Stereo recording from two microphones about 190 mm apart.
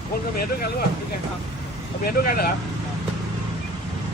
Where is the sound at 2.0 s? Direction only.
50° left (ahead or behind).